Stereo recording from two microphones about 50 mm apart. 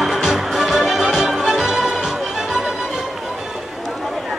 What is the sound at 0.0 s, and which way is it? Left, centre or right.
Music, centre.